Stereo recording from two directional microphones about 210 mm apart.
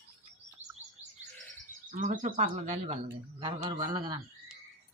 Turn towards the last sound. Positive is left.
turn(degrees=-20)  # may be behind; listen again after turning